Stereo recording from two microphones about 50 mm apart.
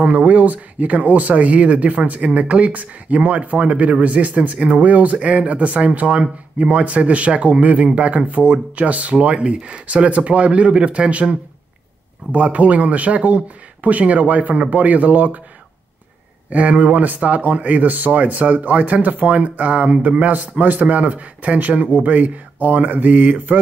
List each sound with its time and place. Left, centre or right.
0.0 s speech: right
16.4 s speech: right